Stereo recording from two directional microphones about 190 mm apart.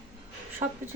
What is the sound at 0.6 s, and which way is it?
Speech, 15° right (ahead or behind).